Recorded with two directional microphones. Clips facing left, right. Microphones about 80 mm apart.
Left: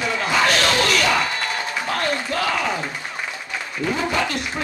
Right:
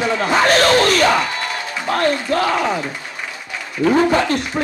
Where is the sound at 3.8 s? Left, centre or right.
Right.